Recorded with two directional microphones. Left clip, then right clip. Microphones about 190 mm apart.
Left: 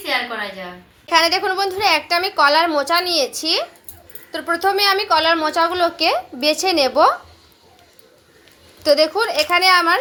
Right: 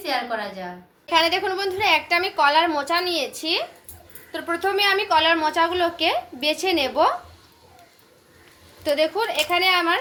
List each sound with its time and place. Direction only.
1.1 s a woman's voice: 35° left (ahead or behind)
8.8 s a woman's voice: 35° left (ahead or behind)